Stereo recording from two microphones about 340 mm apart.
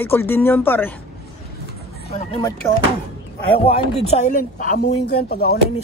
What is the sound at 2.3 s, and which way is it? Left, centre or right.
Speech, centre.